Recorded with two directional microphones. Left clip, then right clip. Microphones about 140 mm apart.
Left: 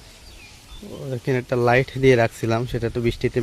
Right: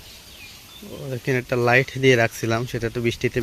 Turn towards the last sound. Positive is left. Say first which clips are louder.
# even
turn(degrees=15)  # may be behind; listen again after turning